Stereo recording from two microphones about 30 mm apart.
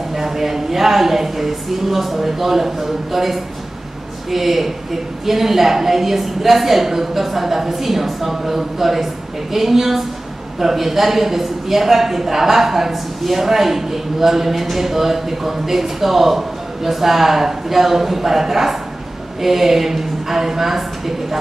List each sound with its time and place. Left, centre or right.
0.1 s a man's voice: centre